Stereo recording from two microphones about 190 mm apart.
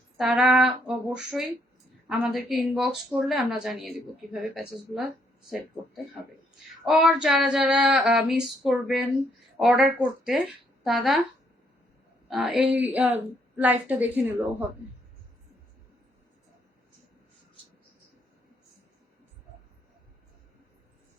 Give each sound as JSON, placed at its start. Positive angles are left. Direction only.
{"t": 0.2, "sound": "speech", "side_deg": 0}
{"t": 6.8, "sound": "speech", "side_deg": 0}
{"t": 12.3, "sound": "a woman's voice", "side_deg": 0}